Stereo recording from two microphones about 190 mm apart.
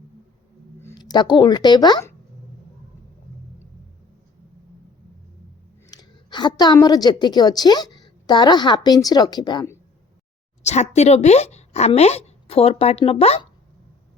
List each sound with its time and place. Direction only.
0.8 s speech: 15° left (ahead or behind)
5.9 s a woman's voice: 20° left (ahead or behind)
10.6 s speech: 35° left (ahead or behind)